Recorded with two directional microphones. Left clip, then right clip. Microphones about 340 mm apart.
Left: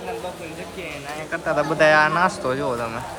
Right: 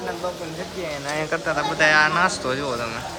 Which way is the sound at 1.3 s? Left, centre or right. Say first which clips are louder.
Left 4 dB; centre.